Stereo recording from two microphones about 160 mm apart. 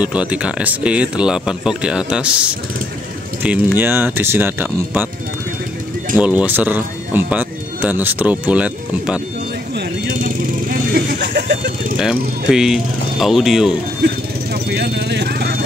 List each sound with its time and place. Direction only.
0.0 s speech: 10° right (ahead or behind)
6.1 s speech: 10° right (ahead or behind)
9.8 s vehicle: 60° right (ahead or behind)
12.0 s speech: 5° right (ahead or behind)
14.0 s vehicle: 85° right